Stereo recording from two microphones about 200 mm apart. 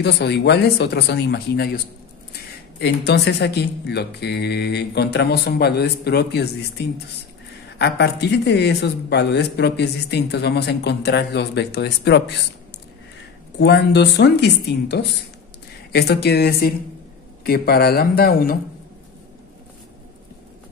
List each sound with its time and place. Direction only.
0.0 s speech: 55° left (ahead or behind)
2.8 s speech: 60° left (ahead or behind)
7.8 s speech: 55° left (ahead or behind)
13.6 s speech: 55° left (ahead or behind)